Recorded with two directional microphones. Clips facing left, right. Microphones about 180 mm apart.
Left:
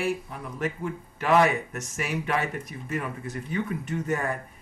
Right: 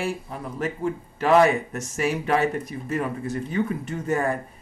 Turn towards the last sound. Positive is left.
turn(degrees=-35)  # may be behind; listen again after turning